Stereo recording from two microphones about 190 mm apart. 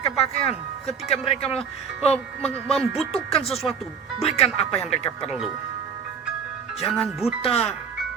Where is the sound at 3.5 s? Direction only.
Centre (ahead or behind).